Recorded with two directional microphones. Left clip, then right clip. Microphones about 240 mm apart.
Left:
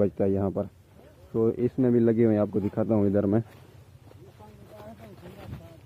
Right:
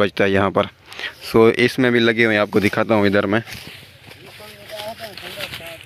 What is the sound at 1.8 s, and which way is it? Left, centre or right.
Speech, centre.